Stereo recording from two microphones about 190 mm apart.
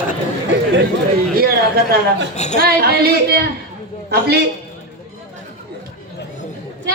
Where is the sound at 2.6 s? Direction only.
55° right (ahead or behind).